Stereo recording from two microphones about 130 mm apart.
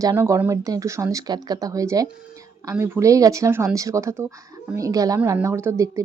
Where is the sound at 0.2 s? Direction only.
20° right (ahead or behind).